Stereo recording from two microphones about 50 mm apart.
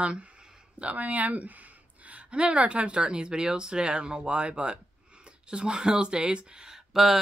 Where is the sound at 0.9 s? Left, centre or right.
Right.